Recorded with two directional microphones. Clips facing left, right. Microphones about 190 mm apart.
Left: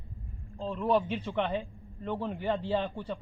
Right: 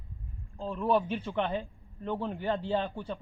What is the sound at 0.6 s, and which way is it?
Speech, 10° right (ahead or behind).